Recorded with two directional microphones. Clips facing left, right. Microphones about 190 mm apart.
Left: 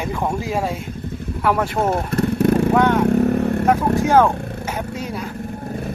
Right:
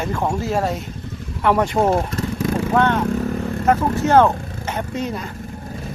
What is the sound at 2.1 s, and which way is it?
Motorcycle, 60° left (ahead or behind).